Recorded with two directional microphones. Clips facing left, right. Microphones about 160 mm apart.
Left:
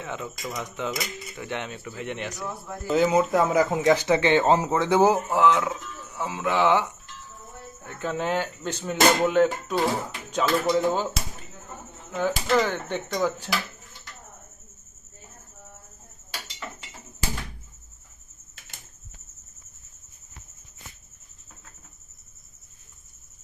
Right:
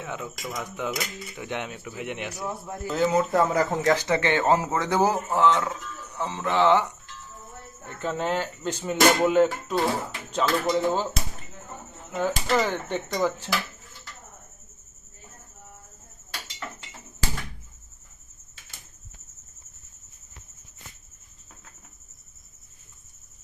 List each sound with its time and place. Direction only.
0.0 s speech: 5° right (ahead or behind)
2.8 s speech: 10° left (ahead or behind)
3.5 s speech: 5° left (ahead or behind)
3.8 s speech: 15° left (ahead or behind)
7.9 s speech: 5° left (ahead or behind)
12.5 s speech: 10° right (ahead or behind)